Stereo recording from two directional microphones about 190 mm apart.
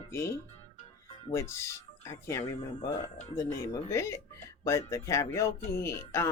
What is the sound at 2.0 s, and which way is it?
Speech, 15° left (ahead or behind).